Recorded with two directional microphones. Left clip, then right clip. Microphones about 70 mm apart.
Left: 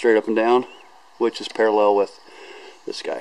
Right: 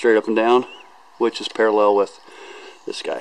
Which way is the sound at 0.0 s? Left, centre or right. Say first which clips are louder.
Right 1 dB; centre.